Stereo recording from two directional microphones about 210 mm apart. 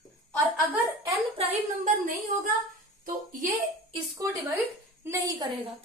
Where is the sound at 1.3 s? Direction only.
40° right (ahead or behind).